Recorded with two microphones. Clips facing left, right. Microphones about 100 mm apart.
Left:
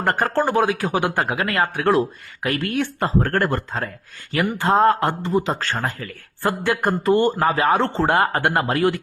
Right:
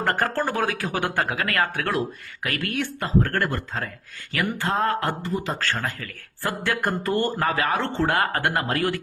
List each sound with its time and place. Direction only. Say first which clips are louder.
0.2 s speech: left 5 dB; 20° left (ahead or behind)